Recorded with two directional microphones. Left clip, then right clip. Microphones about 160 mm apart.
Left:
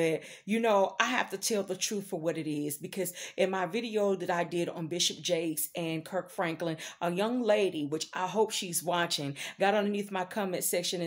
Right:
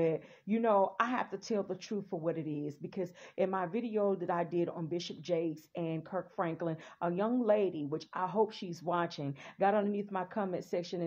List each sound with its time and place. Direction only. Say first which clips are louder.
0.0 s speech: left 3 dB; 25° left (ahead or behind)